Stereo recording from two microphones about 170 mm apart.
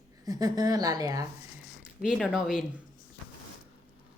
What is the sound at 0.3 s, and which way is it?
A woman's voice, 20° right (ahead or behind).